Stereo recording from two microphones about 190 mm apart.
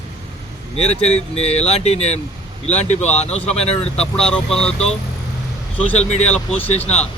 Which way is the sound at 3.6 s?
35° left (ahead or behind).